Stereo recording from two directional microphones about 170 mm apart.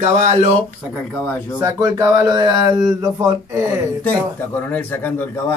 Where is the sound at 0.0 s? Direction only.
40° right (ahead or behind).